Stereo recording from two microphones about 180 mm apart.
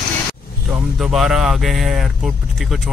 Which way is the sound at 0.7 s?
Centre (ahead or behind).